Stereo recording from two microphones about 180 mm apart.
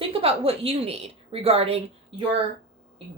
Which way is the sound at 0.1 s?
35° right (ahead or behind).